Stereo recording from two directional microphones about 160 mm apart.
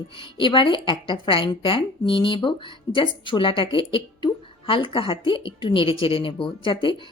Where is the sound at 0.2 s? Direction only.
30° left (ahead or behind).